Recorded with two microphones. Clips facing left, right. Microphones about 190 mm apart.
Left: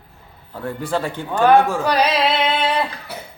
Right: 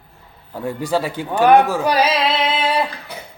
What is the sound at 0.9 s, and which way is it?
A man's voice, 10° right (ahead or behind).